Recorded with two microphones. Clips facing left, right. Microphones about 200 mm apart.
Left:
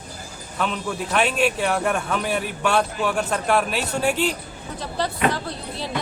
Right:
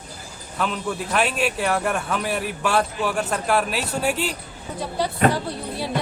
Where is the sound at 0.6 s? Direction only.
Centre (ahead or behind).